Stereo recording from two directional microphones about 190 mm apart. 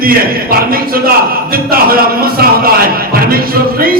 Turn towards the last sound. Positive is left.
turn(degrees=-50)  # may be behind; listen again after turning